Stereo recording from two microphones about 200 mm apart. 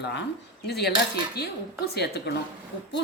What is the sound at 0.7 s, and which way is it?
Speech, 55° left (ahead or behind).